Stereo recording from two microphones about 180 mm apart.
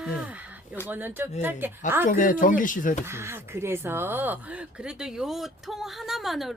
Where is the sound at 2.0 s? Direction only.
50° left (ahead or behind).